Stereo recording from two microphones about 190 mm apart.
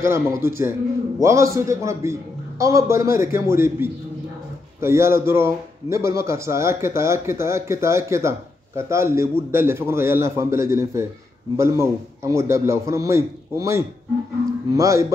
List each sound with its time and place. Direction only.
0.0 s a man's voice: 15° right (ahead or behind)